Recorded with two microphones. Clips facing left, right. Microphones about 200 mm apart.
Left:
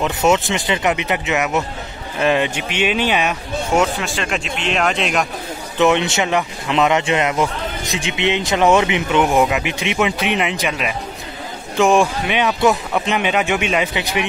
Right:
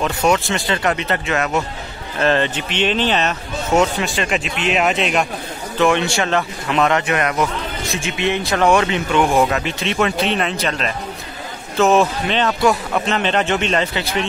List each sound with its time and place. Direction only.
0.0 s speech: 20° left (ahead or behind); by 5.2 s centre (ahead or behind)
5.8 s a man's voice: 20° left (ahead or behind)